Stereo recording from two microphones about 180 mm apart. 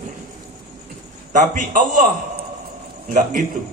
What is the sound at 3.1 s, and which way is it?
Speech, 45° right (ahead or behind).